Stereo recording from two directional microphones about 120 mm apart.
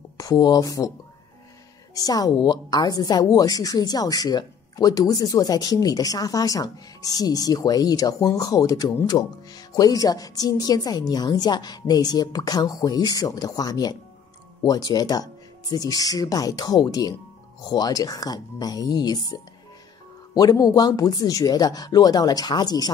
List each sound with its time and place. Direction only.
0.2 s speech: 30° left (ahead or behind)
2.0 s a woman's voice: 30° left (ahead or behind)